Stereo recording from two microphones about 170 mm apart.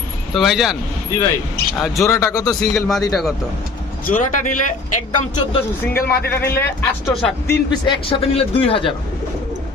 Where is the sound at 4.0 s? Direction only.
55° left (ahead or behind).